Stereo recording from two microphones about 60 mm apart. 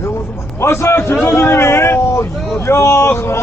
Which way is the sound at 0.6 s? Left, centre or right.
Left.